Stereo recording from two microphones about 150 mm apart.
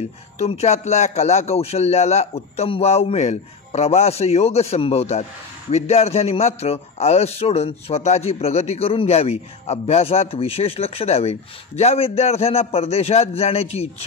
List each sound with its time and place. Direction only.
0.4 s a man's voice: 45° left (ahead or behind)